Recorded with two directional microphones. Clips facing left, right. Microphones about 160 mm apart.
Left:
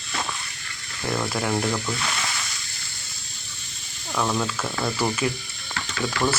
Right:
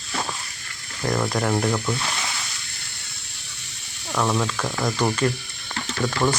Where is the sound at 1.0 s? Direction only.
5° right (ahead or behind).